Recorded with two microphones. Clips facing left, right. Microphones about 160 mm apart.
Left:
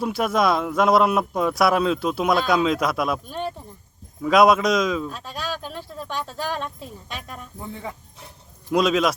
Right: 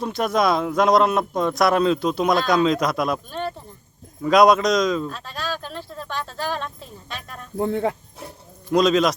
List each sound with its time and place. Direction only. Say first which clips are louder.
0.0 s speech: even; 5° left (ahead or behind)
3.2 s speech: right 1 dB; 10° left (ahead or behind)
7.6 s speech: right 13 dB; 70° right (ahead or behind)
8.7 s speech: right 2 dB; 5° left (ahead or behind)